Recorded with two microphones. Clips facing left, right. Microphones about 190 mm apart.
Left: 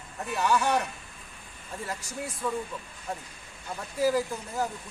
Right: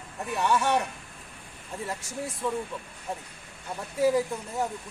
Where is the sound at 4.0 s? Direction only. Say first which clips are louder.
Right 2 dB; centre (ahead or behind).